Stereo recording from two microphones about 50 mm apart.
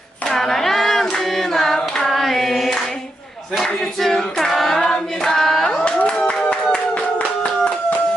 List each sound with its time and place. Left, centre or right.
0.3 s hands: centre
3.5 s choir: centre
5.8 s clapping: left